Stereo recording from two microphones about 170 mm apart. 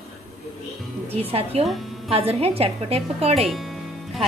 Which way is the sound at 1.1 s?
35° right (ahead or behind).